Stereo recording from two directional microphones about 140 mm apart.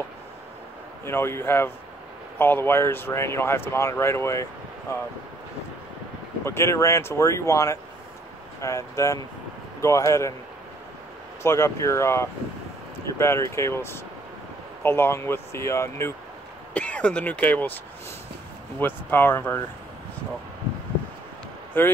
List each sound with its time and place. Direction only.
1.0 s speech: 15° left (ahead or behind)
6.4 s speech: 20° left (ahead or behind)
11.4 s speech: 20° left (ahead or behind)
16.7 s speech: 10° left (ahead or behind)
18.8 s speech: 15° left (ahead or behind)
21.7 s speech: 15° left (ahead or behind)